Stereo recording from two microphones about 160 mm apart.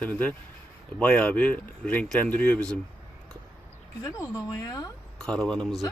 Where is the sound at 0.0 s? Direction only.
10° left (ahead or behind).